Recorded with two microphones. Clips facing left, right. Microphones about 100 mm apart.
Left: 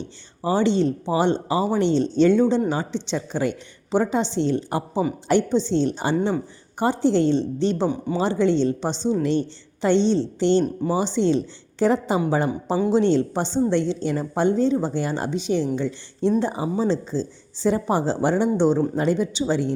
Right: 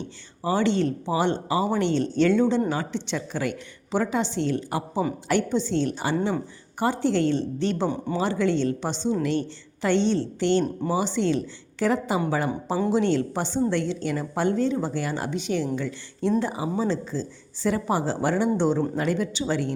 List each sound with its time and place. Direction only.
0.4 s a woman's voice: 20° left (ahead or behind)